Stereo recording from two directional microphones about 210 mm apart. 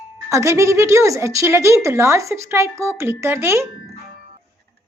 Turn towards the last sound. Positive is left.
turn(degrees=-10)  # may be behind; listen again after turning